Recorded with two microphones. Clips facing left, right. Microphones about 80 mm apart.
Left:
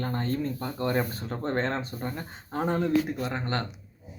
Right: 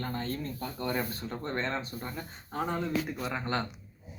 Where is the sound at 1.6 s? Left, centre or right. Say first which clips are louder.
Left 3 dB; left.